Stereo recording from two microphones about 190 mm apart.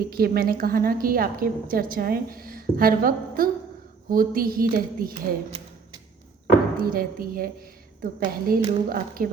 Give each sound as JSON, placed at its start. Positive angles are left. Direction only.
{"t": 0.1, "sound": "a woman's voice", "side_deg": -50}
{"t": 5.5, "sound": "a sound", "side_deg": -25}
{"t": 6.7, "sound": "a woman's voice", "side_deg": -50}